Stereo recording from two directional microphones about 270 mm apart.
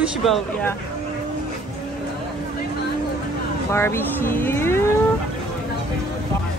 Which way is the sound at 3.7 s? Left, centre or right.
Centre.